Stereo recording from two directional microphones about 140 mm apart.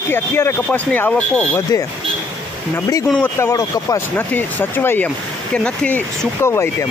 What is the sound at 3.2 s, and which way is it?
Speech, 20° left (ahead or behind).